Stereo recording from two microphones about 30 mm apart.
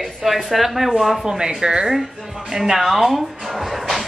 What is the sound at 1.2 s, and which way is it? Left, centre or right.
A woman's voice, right.